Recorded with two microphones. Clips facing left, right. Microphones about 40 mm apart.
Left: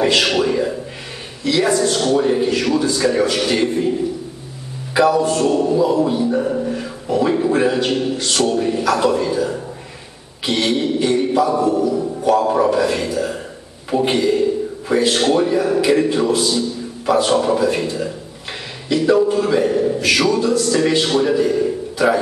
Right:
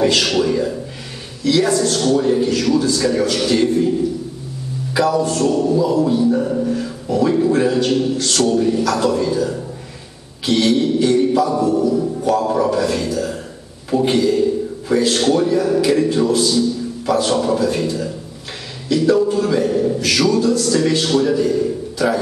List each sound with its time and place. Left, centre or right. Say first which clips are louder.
0.0 s a man's voice: even; centre
4.9 s a man's voice: left 2 dB; left